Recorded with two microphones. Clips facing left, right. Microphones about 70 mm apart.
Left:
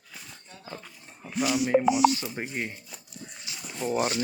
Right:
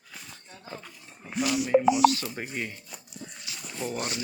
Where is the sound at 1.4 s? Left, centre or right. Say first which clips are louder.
Left 1 dB; centre.